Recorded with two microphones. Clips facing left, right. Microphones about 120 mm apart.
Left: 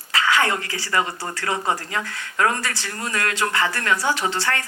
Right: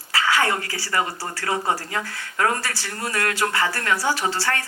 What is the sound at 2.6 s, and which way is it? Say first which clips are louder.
Speech: left 1 dB; 20° left (ahead or behind).